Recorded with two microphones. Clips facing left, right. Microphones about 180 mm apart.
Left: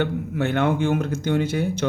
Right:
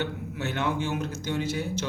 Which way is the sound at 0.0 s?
55° left (ahead or behind).